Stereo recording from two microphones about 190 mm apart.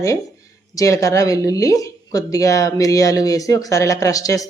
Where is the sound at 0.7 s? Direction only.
15° left (ahead or behind).